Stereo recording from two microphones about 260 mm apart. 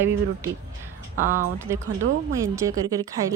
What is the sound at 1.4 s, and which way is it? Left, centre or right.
A woman's voice, centre.